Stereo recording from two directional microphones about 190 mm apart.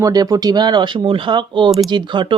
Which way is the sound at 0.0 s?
20° right (ahead or behind).